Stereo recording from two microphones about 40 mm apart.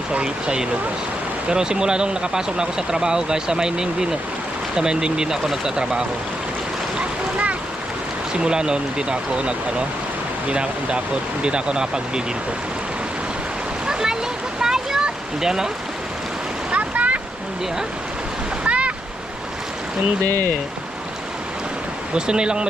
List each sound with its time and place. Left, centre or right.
0.1 s speech: right
8.3 s speech: right
13.8 s splash: centre
14.6 s a sound: centre
16.7 s waves: right
18.6 s waves: right
22.1 s speech: right